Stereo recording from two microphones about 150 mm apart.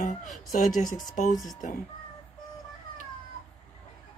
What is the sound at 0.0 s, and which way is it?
Speech, 60° left (ahead or behind).